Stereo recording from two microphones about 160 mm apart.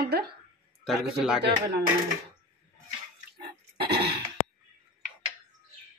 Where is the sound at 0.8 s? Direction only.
5° right (ahead or behind).